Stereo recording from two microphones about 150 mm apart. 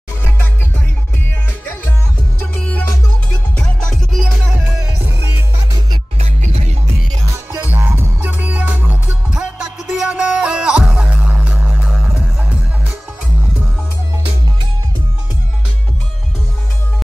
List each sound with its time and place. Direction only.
3.9 s music: centre (ahead or behind)
6.1 s music: 45° right (ahead or behind)
7.5 s music: 15° right (ahead or behind)